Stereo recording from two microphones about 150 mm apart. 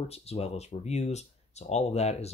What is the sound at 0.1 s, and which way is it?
Speech, 45° left (ahead or behind).